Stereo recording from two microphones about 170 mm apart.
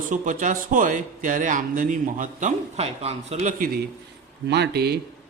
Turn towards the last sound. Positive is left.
turn(degrees=-70)  # may be behind; listen again after turning